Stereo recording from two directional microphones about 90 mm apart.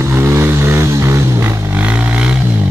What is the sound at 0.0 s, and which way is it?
Music, 25° right (ahead or behind).